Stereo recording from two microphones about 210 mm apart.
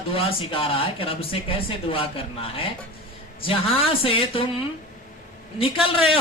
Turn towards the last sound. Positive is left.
turn(degrees=25)  # may be behind; listen again after turning